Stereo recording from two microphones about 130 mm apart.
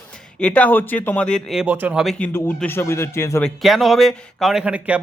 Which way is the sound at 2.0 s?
Centre (ahead or behind).